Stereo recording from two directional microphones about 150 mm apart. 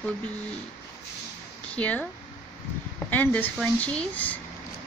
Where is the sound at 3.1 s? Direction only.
10° left (ahead or behind).